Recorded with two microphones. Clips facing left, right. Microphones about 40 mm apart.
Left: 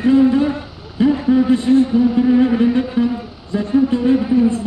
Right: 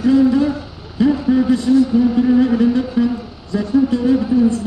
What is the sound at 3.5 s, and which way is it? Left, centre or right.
Speech, left.